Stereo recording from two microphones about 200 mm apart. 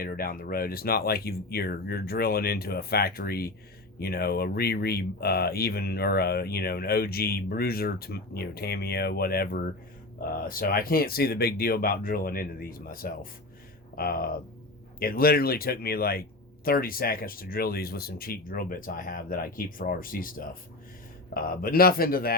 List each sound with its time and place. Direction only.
0.0 s speech: 50° left (ahead or behind)